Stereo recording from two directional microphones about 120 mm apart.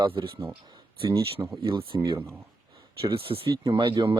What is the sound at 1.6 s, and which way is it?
Speech, 45° right (ahead or behind).